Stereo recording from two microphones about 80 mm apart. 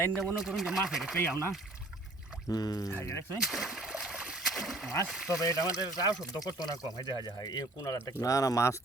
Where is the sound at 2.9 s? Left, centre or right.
Left.